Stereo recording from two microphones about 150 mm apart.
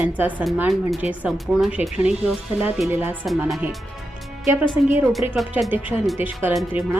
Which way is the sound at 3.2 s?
Centre (ahead or behind).